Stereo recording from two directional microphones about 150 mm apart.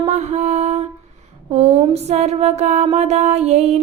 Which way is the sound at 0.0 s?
45° right (ahead or behind).